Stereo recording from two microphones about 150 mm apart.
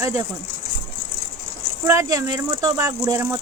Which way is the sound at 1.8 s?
20° right (ahead or behind).